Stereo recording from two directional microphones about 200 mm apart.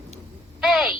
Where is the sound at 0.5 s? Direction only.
Centre (ahead or behind).